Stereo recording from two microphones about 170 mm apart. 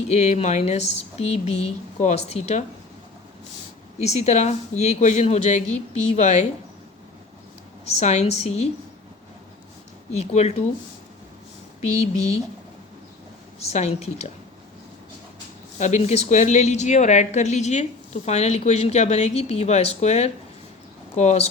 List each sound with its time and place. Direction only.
0.1 s speech: 40° left (ahead or behind)
4.0 s speech: 40° left (ahead or behind)
7.9 s speech: 40° left (ahead or behind)
10.1 s speech: 40° left (ahead or behind)
11.8 s speech: 40° left (ahead or behind)
13.6 s speech: 40° left (ahead or behind)
15.8 s speech: 40° left (ahead or behind)